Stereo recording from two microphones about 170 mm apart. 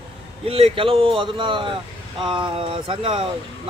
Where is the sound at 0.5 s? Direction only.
35° right (ahead or behind).